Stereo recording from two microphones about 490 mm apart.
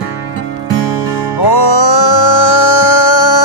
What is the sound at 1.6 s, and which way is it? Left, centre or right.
Music, left.